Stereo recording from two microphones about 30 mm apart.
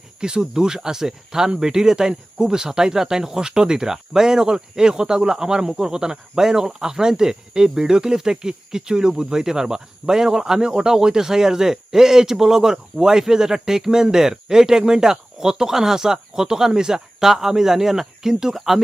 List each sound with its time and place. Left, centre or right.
0.2 s speech: right